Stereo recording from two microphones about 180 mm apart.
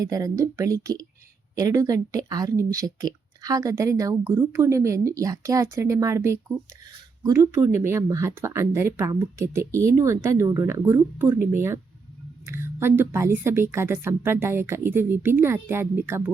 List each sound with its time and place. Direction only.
0.0 s speech: 20° right (ahead or behind)